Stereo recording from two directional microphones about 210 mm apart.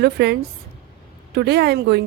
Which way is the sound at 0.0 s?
50° right (ahead or behind).